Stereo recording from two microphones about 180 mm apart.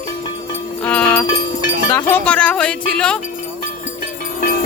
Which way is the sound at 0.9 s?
5° left (ahead or behind).